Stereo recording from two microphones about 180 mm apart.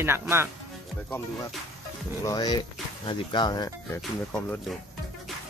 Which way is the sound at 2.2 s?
20° left (ahead or behind).